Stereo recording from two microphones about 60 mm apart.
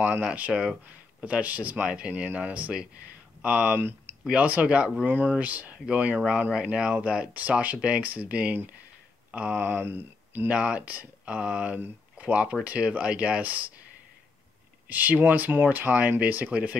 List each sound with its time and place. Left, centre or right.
0.2 s speech: right
0.5 s speech: centre
1.2 s speech: right
3.7 s a sound: right
4.2 s speech: centre
5.0 s speech: right
10.5 s speech: centre
14.9 s speech: right